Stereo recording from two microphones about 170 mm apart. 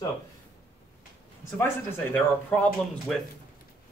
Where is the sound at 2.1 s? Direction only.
10° left (ahead or behind).